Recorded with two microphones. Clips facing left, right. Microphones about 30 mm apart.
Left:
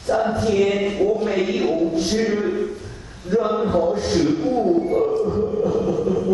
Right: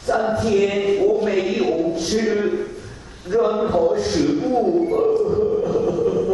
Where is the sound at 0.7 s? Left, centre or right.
Centre.